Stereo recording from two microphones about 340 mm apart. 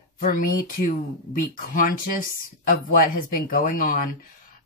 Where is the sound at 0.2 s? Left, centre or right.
Left.